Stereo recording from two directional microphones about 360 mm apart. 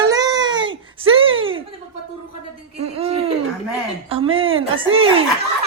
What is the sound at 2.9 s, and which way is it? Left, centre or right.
Speech, centre.